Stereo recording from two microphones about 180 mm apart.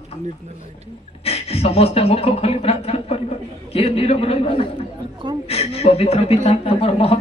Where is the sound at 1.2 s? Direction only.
35° left (ahead or behind).